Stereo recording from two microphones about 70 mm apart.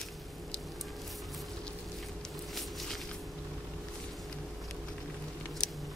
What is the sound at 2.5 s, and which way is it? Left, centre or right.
Walk, centre.